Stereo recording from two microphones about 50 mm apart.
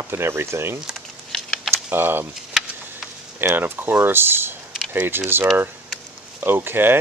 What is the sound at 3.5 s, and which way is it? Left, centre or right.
Speech, right.